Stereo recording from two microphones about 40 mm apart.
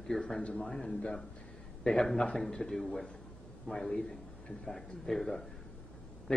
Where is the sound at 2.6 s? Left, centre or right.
Centre.